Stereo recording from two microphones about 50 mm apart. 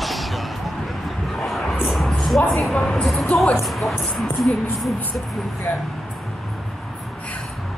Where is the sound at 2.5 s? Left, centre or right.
Centre.